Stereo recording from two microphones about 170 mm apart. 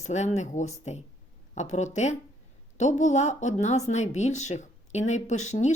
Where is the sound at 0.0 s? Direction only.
45° left (ahead or behind).